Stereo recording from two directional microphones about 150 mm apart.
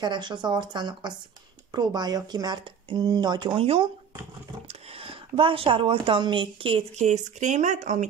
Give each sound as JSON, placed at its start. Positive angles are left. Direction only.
{"t": 0.0, "sound": "speech", "side_deg": -30}